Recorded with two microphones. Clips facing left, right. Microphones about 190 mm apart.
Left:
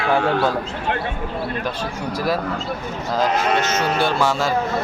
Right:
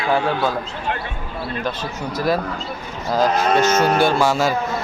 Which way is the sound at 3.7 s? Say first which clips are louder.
Right 4 dB; 45° right (ahead or behind).